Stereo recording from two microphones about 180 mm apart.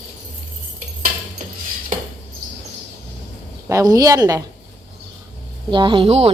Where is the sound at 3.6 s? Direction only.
20° right (ahead or behind).